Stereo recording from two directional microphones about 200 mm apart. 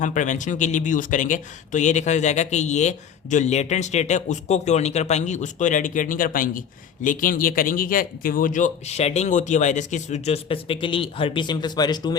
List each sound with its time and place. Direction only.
0.0 s speech: 40° left (ahead or behind); by 12.1 s 20° left (ahead or behind)